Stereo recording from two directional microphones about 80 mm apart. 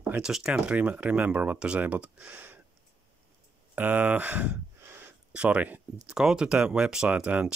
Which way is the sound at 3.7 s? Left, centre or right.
Centre.